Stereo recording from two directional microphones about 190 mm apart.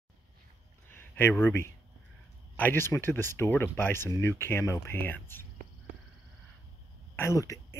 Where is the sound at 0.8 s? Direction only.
10° left (ahead or behind).